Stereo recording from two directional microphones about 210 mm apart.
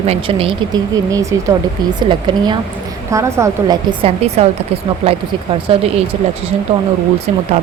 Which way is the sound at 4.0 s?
30° right (ahead or behind).